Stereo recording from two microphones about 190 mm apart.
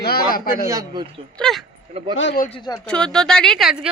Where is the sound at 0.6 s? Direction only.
20° right (ahead or behind).